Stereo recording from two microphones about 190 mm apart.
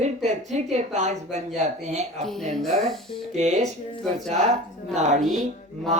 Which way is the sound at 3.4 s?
40° right (ahead or behind).